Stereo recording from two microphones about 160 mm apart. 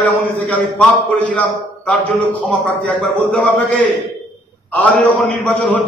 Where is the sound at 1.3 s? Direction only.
10° left (ahead or behind).